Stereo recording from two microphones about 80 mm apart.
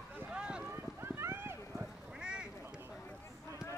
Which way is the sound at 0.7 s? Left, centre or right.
Right.